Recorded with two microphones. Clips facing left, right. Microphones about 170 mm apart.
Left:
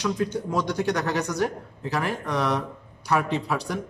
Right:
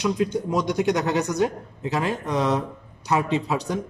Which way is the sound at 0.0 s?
20° right (ahead or behind).